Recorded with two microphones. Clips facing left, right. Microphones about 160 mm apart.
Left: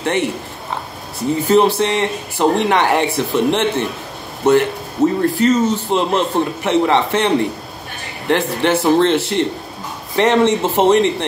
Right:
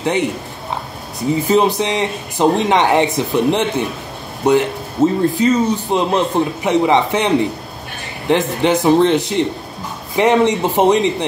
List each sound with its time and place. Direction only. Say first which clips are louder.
0.0 s speech: right 1 dB; 15° right (ahead or behind)
1.5 s speech: left 2 dB; 15° right (ahead or behind)